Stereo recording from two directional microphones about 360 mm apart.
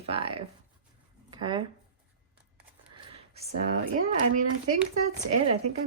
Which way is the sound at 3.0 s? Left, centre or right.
Centre.